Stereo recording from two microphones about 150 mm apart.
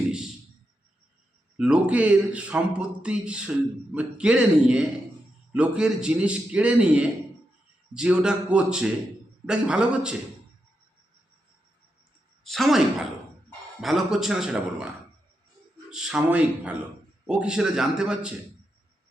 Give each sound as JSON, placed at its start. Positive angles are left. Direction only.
{"t": 1.5, "sound": "a man's voice", "side_deg": -5}
{"t": 12.5, "sound": "a woman's voice", "side_deg": 0}
{"t": 15.9, "sound": "a man's voice", "side_deg": -5}